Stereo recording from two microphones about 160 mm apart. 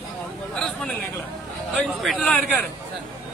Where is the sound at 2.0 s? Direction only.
5° left (ahead or behind).